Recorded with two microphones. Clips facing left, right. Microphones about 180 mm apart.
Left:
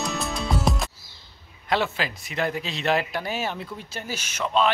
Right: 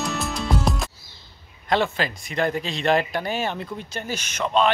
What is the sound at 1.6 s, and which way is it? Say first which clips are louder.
Speech: right 3 dB; 5° left (ahead or behind).